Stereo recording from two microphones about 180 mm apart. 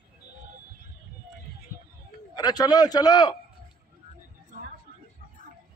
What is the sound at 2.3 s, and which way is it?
A man's voice, 20° left (ahead or behind).